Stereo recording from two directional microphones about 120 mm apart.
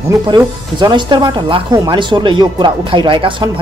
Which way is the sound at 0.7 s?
40° right (ahead or behind).